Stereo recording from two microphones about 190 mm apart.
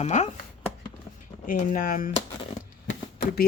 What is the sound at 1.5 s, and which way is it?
Speech, 45° left (ahead or behind).